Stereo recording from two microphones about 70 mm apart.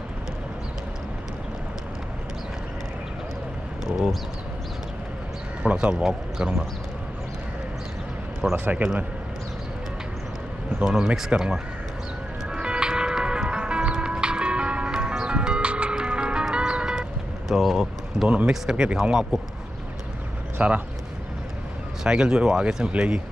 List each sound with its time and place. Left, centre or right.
3.8 s speech: centre
5.6 s speech: centre
8.5 s a man's voice: right
10.8 s speech: centre
12.4 s music: centre
17.5 s speech: centre
20.5 s speech: right
22.0 s speech: centre